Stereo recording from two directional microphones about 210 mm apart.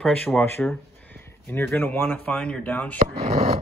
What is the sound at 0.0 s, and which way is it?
Speech, 5° left (ahead or behind).